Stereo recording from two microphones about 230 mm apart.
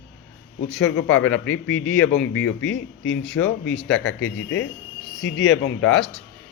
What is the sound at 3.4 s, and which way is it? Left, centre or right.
Speech, left.